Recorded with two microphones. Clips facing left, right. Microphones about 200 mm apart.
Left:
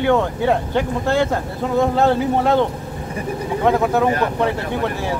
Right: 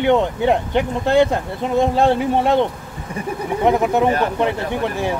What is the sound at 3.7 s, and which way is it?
Speech, 20° right (ahead or behind).